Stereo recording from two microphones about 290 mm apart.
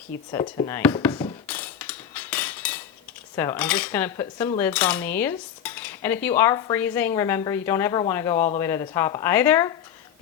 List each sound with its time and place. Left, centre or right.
0.1 s cutlery: centre
0.4 s speech: left
0.7 s cutlery: centre